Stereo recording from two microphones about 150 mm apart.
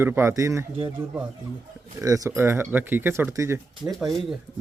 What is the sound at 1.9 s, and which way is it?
A man's voice, 20° right (ahead or behind).